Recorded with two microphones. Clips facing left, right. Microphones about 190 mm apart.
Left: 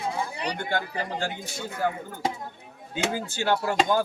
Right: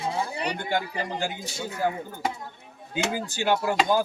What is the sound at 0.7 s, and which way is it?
Speech, 15° right (ahead or behind).